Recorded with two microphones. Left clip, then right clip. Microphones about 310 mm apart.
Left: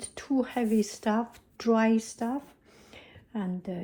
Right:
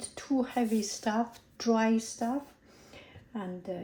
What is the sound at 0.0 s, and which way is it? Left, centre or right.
A woman's voice, left.